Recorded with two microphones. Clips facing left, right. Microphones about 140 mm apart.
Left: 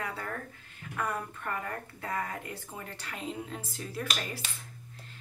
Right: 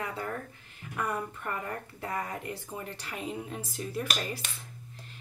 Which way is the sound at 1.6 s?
15° right (ahead or behind).